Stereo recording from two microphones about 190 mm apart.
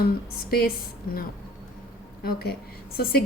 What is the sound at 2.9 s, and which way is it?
Speech, 55° left (ahead or behind).